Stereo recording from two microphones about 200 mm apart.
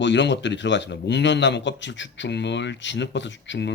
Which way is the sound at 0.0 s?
60° left (ahead or behind).